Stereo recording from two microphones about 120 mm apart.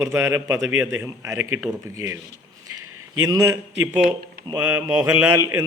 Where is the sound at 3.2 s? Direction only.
30° right (ahead or behind).